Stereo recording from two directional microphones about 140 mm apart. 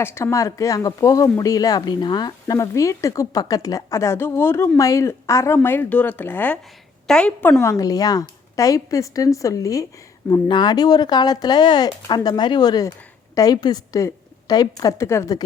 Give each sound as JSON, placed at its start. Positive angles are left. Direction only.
{"t": 0.0, "sound": "speech", "side_deg": 20}
{"t": 7.6, "sound": "speech", "side_deg": 25}